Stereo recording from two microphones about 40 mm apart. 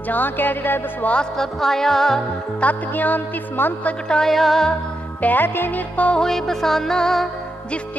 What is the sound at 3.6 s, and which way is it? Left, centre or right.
Speech, left.